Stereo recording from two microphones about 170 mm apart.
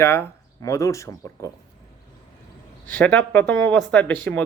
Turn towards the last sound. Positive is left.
turn(degrees=10)  # may be behind; listen again after turning